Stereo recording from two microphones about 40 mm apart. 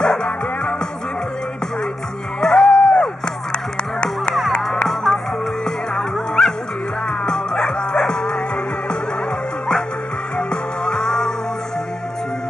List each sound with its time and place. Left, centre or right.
0.0 s music: left
2.4 s music: centre
2.8 s music: left
4.8 s music: centre
7.1 s music: centre
10.3 s music: left